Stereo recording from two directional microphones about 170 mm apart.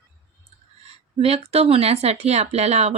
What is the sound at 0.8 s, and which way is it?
Speech, 35° right (ahead or behind).